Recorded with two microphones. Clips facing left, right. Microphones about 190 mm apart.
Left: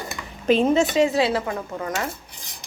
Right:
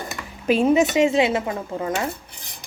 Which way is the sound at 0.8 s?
20° right (ahead or behind).